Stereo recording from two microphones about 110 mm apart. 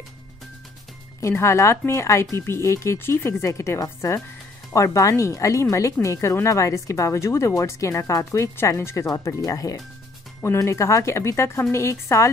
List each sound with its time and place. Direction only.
1.2 s speech: 25° left (ahead or behind)